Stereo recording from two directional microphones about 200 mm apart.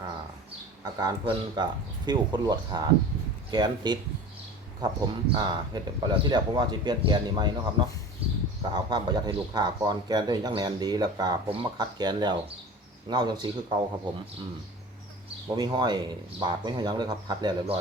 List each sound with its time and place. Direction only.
0.9 s speech: 20° right (ahead or behind)
8.7 s speech: 20° right (ahead or behind)
15.4 s speech: 20° right (ahead or behind)